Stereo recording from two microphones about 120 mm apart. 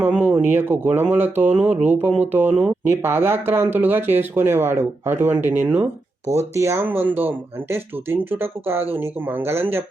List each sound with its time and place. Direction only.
0.0 s speech: 10° right (ahead or behind)
6.3 s speech: 25° right (ahead or behind)